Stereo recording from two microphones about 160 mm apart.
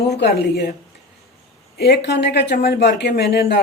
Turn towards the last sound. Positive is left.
turn(degrees=90)